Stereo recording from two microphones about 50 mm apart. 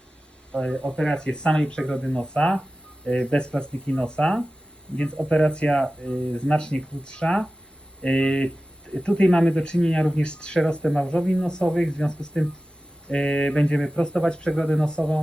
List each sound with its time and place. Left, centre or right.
0.5 s speech: centre